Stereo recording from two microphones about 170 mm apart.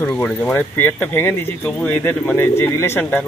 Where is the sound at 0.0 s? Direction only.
10° left (ahead or behind).